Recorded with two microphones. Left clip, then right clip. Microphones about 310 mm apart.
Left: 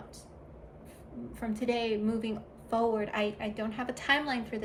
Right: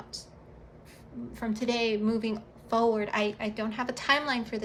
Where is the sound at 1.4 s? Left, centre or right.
Centre.